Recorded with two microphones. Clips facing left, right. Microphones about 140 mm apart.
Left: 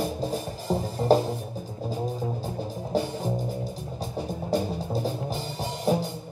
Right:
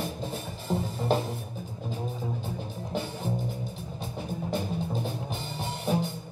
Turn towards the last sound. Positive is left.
turn(degrees=35)  # may be behind; listen again after turning